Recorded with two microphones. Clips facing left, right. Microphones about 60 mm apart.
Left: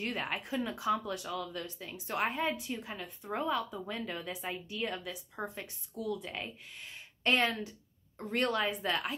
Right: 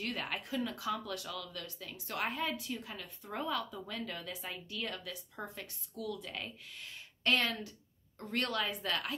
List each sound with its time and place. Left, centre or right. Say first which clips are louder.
0.0 s speech: left 3 dB; left